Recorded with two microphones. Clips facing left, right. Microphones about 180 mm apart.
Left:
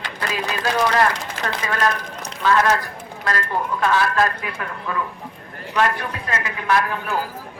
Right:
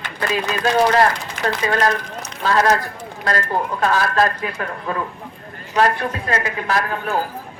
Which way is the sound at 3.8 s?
40° right (ahead or behind).